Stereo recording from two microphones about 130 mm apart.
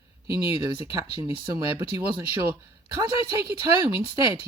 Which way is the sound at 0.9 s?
25° right (ahead or behind).